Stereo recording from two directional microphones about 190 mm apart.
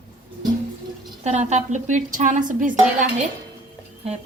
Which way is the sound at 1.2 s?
35° right (ahead or behind).